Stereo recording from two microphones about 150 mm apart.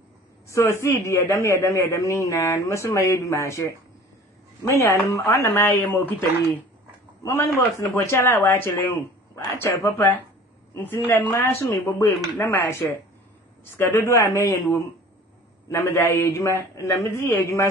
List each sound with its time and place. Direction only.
0.5 s a man's voice: 20° left (ahead or behind)
4.7 s a man's voice: 20° left (ahead or behind)
11.3 s a man's voice: 20° left (ahead or behind)